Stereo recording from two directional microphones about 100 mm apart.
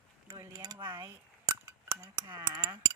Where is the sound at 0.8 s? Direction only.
50° right (ahead or behind).